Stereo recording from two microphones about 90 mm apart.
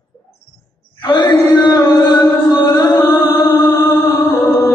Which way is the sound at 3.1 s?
50° left (ahead or behind).